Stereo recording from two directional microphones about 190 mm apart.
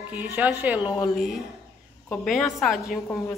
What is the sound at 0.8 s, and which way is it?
Speech, 20° left (ahead or behind).